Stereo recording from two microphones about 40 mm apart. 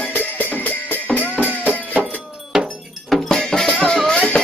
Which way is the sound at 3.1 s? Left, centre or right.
Centre.